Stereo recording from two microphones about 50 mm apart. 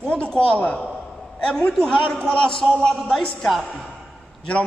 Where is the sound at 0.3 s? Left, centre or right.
Centre.